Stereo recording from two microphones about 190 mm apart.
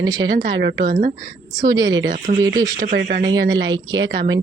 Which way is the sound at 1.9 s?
75° right (ahead or behind).